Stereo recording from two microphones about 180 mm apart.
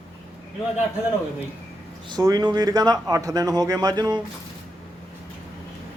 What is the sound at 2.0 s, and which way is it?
Speech, 20° right (ahead or behind).